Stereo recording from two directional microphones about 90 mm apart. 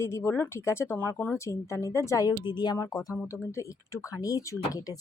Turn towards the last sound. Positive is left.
turn(degrees=40)  # may be behind; listen again after turning